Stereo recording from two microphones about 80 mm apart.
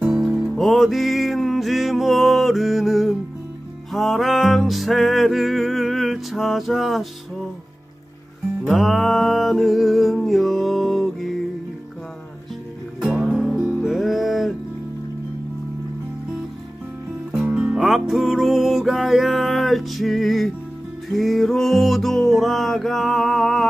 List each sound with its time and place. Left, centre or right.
0.1 s music: centre
0.6 s music: centre
8.7 s a sound: centre
13.0 s music: centre
17.3 s music: centre
17.7 s music: centre